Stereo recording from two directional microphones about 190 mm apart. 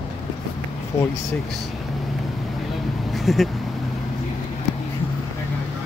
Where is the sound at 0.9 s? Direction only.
15° left (ahead or behind).